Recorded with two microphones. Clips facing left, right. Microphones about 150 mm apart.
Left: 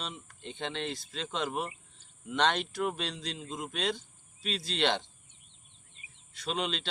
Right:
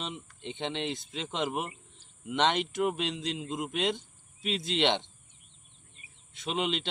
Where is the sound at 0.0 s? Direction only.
20° right (ahead or behind).